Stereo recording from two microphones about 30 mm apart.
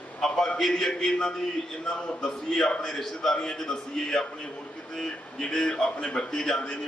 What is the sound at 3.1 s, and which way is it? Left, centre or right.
A man's voice, left.